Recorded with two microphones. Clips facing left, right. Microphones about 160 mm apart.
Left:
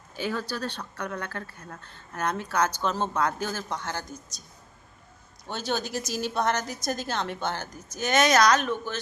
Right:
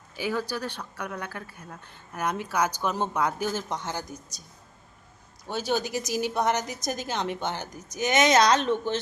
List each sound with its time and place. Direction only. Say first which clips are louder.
0.2 s speech: right 1 dB; 15° right (ahead or behind)
5.5 s speech: right 2 dB; 10° right (ahead or behind); by 9.0 s 25° right (ahead or behind)